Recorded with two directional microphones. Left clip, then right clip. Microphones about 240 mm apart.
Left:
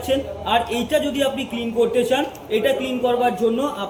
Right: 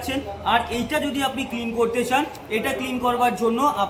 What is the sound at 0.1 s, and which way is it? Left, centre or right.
A man's voice, centre.